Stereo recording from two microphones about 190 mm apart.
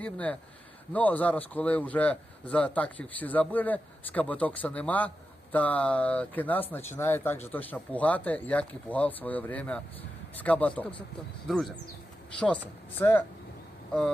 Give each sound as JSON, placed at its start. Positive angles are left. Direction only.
{"t": 0.0, "sound": "a man's voice", "side_deg": 5}
{"t": 13.0, "sound": "a man's voice", "side_deg": 10}